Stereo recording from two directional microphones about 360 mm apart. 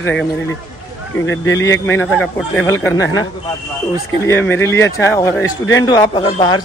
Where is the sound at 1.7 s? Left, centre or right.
Centre.